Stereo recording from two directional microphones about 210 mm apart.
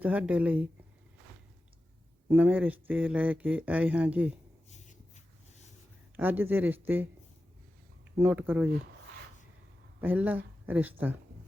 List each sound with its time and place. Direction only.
0.0 s speech: 5° right (ahead or behind)
2.3 s speech: 10° right (ahead or behind)
4.7 s a sound: 35° left (ahead or behind)
6.1 s speech: 10° right (ahead or behind)
8.1 s speech: 10° right (ahead or behind)
10.0 s speech: 10° right (ahead or behind)